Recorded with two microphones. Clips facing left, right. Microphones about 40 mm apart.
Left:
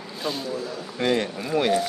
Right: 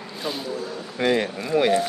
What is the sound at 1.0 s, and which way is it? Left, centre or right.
Speech, centre.